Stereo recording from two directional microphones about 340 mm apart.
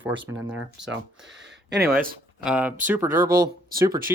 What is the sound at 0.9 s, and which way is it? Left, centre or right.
Speech, right.